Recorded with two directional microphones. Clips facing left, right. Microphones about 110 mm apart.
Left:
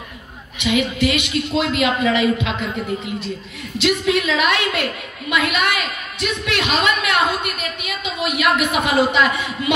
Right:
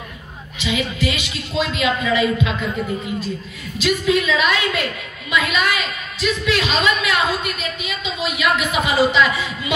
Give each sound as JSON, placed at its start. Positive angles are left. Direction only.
{"t": 0.6, "sound": "a woman's voice", "side_deg": 60}
{"t": 3.7, "sound": "a woman's voice", "side_deg": 70}